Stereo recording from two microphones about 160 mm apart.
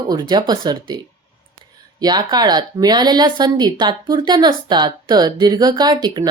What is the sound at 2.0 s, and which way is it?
A woman's voice, 25° right (ahead or behind).